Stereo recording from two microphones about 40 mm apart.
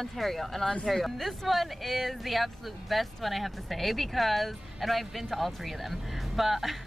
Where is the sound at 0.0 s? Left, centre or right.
Centre.